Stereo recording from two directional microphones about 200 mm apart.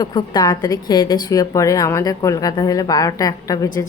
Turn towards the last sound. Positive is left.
turn(degrees=20)  # may be behind; listen again after turning